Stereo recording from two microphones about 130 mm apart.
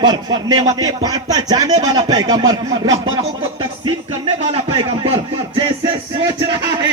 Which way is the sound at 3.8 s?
40° right (ahead or behind).